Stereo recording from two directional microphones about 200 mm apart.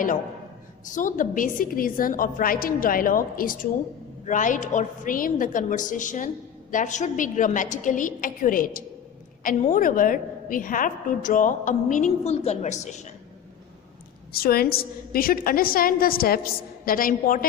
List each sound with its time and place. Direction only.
0.9 s a woman's voice: 40° left (ahead or behind)
14.3 s a woman's voice: 50° left (ahead or behind)